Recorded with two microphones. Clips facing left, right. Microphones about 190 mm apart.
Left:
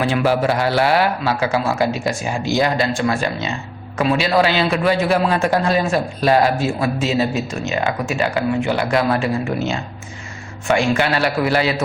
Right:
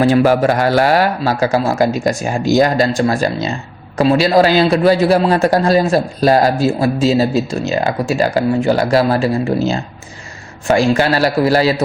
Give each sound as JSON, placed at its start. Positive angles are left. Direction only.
{"t": 0.0, "sound": "a man's voice", "side_deg": -40}